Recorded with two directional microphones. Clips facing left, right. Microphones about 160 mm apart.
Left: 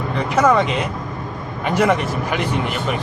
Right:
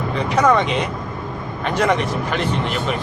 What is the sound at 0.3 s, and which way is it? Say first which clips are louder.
Speech: left 1 dB; 5° left (ahead or behind).